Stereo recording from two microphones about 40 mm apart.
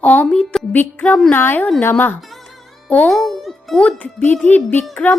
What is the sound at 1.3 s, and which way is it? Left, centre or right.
Speech, left.